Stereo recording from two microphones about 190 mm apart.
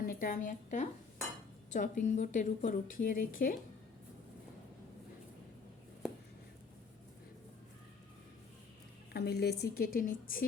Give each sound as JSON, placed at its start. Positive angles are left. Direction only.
{"t": 0.0, "sound": "a woman's voice", "side_deg": 45}
{"t": 9.1, "sound": "a woman's voice", "side_deg": 60}